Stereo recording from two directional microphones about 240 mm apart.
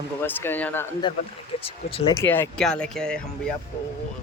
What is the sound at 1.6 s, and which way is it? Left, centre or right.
Speech, left.